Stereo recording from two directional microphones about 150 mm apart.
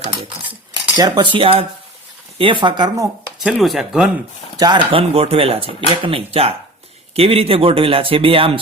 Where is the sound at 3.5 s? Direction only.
Centre (ahead or behind).